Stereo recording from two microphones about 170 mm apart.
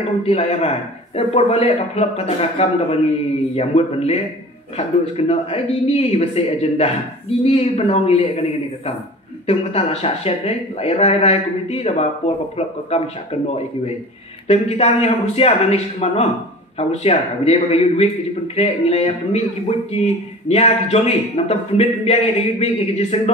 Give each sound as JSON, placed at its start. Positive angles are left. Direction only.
{"t": 0.2, "sound": "speech", "side_deg": 35}
{"t": 14.5, "sound": "speech", "side_deg": 35}